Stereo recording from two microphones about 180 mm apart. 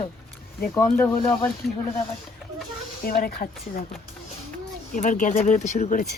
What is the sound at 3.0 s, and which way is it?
Speech, 55° left (ahead or behind).